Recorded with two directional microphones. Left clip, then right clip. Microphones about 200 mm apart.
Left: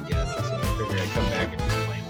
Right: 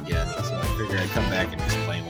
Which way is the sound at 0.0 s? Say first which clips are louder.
Right 1 dB; centre (ahead or behind).